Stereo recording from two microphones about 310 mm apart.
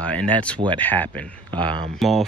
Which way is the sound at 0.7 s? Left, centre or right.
Centre.